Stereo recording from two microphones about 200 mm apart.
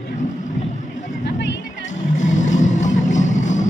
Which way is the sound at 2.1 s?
35° left (ahead or behind).